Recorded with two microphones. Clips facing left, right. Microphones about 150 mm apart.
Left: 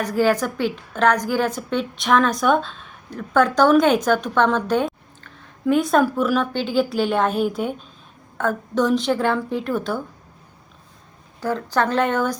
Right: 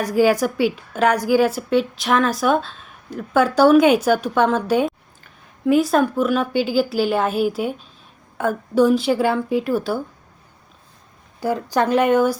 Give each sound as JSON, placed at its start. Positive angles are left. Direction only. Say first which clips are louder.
{"t": 0.0, "sound": "a woman's voice", "louder": "right 3 dB", "side_deg": -10}
{"t": 11.3, "sound": "a woman's voice", "louder": "right 2 dB", "side_deg": -10}